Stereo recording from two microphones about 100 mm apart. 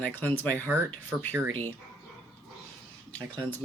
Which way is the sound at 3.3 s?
15° left (ahead or behind).